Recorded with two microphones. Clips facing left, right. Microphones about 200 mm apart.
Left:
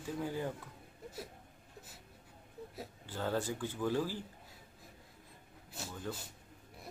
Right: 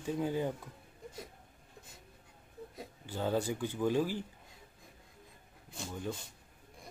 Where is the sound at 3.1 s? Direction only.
15° right (ahead or behind).